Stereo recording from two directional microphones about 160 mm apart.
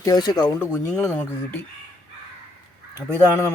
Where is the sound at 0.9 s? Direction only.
10° left (ahead or behind).